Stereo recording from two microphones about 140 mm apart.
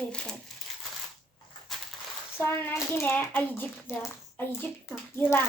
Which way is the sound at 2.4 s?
15° left (ahead or behind).